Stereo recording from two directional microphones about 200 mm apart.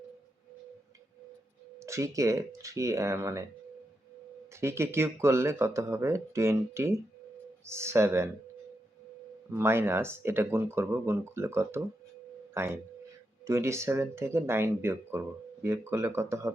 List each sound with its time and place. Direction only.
1.8 s speech: 15° right (ahead or behind)
4.5 s speech: 15° right (ahead or behind)
9.5 s speech: 10° right (ahead or behind)